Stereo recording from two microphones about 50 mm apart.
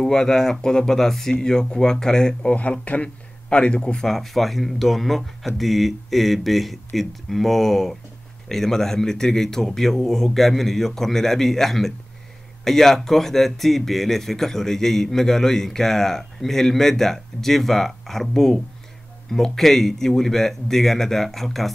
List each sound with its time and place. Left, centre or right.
0.0 s speech: centre
2.5 s speech: left
4.1 s a man's voice: centre